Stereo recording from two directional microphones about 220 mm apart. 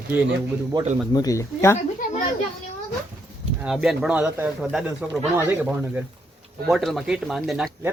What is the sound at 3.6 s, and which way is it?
Speech, 5° right (ahead or behind).